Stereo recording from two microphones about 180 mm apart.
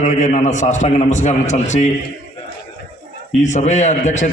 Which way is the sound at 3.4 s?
40° left (ahead or behind).